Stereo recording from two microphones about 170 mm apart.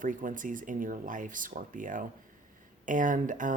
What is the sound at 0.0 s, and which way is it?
Speech, 50° right (ahead or behind).